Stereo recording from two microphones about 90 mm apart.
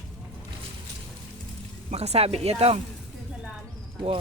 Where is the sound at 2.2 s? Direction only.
90° right.